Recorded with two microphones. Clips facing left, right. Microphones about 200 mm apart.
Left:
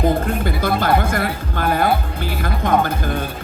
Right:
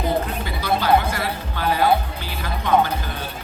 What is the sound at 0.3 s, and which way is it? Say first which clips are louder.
Speech: left 4 dB; 50° left (ahead or behind).